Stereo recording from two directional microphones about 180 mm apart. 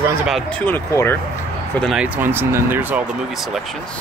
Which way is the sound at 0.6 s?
15° left (ahead or behind).